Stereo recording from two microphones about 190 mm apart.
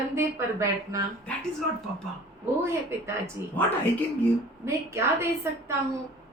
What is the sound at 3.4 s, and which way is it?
Speech, 15° right (ahead or behind).